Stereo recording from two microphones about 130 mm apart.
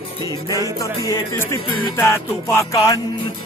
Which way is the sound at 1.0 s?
25° left (ahead or behind).